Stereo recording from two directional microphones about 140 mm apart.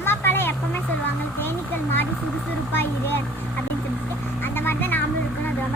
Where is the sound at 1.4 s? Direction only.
15° left (ahead or behind).